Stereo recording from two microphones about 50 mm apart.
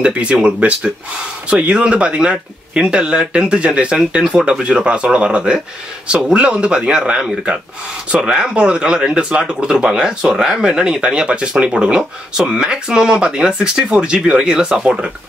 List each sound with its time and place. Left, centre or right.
0.0 s speech: right